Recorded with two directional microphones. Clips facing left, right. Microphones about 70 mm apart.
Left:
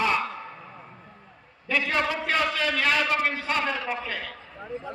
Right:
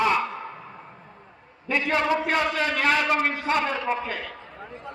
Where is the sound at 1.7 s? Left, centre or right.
Right.